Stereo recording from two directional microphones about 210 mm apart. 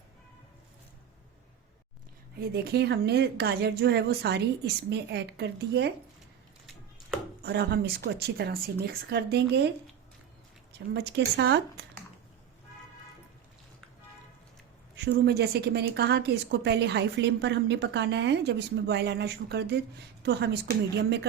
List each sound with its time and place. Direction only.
2.4 s a woman's voice: 50° right (ahead or behind)
7.4 s a woman's voice: 50° right (ahead or behind)
14.9 s a woman's voice: 55° right (ahead or behind)